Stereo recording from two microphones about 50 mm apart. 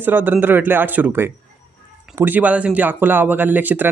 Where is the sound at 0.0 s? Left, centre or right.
Right.